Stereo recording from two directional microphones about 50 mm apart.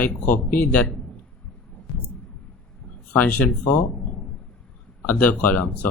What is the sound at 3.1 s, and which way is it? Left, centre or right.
Speech, left.